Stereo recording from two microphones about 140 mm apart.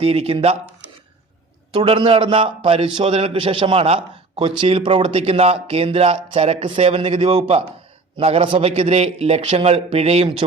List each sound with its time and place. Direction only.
0.0 s a man's voice: 45° right (ahead or behind)
1.7 s a man's voice: 40° right (ahead or behind)